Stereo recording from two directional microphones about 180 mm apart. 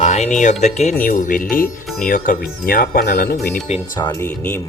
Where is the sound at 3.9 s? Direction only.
20° left (ahead or behind).